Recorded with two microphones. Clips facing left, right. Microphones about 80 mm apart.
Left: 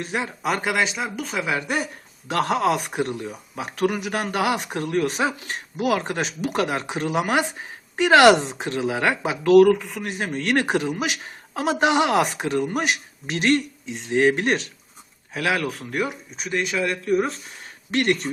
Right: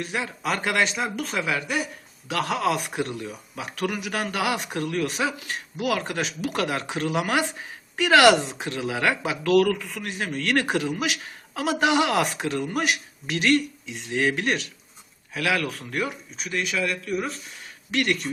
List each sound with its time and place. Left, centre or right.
0.0 s speech: left; by 1.5 s centre
1.6 s speech: left
2.3 s a man's voice: left